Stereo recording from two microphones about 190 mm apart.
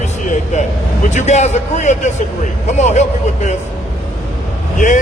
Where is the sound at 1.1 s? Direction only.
40° left (ahead or behind).